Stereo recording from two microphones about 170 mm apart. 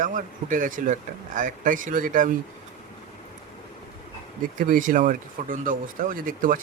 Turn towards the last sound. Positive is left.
turn(degrees=-50)  # may be behind; listen again after turning